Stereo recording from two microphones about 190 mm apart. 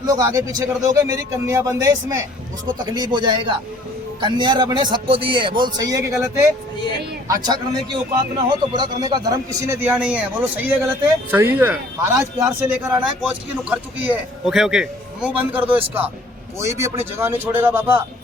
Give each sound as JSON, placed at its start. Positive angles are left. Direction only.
{"t": 0.0, "sound": "a man's voice", "side_deg": -20}